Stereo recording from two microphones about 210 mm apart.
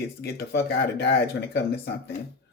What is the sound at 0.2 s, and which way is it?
Speech, 50° left (ahead or behind).